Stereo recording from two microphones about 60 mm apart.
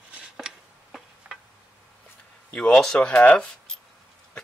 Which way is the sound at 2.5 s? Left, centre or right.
Centre.